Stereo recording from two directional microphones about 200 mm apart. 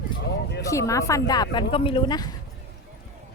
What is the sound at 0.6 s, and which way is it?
A woman's voice, 15° left (ahead or behind).